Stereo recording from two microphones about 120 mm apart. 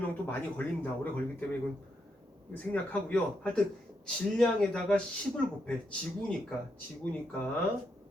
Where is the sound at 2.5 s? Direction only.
10° left (ahead or behind).